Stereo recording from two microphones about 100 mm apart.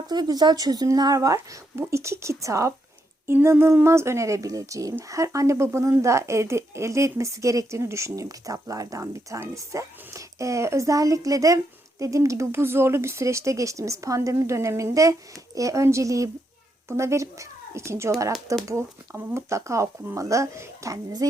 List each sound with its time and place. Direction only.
0.1 s speech: 40° right (ahead or behind)